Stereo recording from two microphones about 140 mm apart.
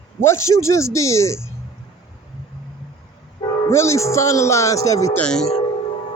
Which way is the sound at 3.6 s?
20° left (ahead or behind).